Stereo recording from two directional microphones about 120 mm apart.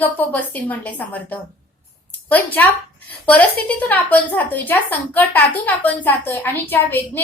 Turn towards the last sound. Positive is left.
turn(degrees=15)  # may be behind; listen again after turning